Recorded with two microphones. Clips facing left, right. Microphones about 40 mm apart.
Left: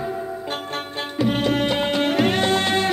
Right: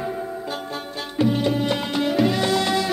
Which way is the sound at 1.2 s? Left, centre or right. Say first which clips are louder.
Even; left.